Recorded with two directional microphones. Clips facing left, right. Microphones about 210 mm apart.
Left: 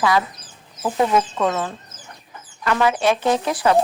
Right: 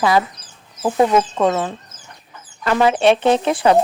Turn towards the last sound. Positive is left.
turn(degrees=-25)  # may be behind; listen again after turning